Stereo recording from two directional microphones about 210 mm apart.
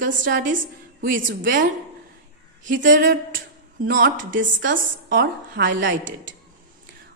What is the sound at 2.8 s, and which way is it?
Speech, 40° right (ahead or behind).